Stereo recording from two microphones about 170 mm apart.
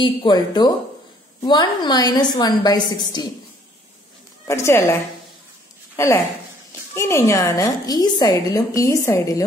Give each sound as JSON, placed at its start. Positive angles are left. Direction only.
{"t": 0.0, "sound": "a woman's voice", "side_deg": 25}
{"t": 4.5, "sound": "a woman's voice", "side_deg": 15}
{"t": 6.0, "sound": "a woman's voice", "side_deg": 15}